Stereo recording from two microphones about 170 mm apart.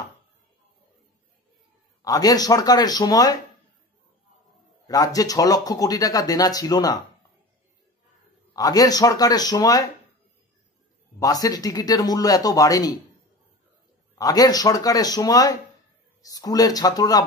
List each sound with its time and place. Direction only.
2.0 s speech: 20° left (ahead or behind)
4.8 s speech: 20° left (ahead or behind)
8.5 s speech: 20° left (ahead or behind)
11.1 s speech: 20° left (ahead or behind)
14.1 s speech: 20° left (ahead or behind)